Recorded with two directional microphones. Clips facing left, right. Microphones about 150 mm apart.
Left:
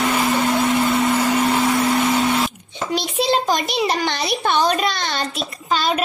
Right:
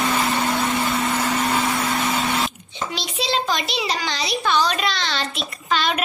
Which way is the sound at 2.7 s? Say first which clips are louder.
Left 5 dB; 50° left (ahead or behind).